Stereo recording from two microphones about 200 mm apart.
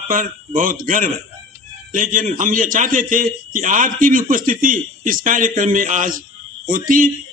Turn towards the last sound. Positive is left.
turn(degrees=-45)  # may be behind; listen again after turning